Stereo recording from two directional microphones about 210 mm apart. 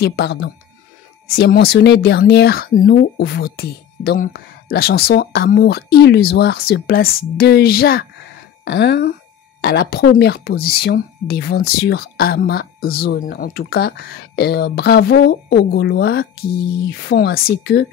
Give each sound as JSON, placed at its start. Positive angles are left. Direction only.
{"t": 0.0, "sound": "speech", "side_deg": 50}